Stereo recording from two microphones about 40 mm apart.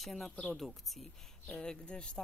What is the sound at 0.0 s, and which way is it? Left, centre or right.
Speech, centre.